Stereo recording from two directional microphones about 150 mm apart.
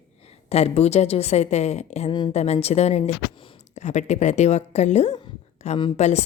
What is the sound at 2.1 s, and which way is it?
Speech, 30° left (ahead or behind).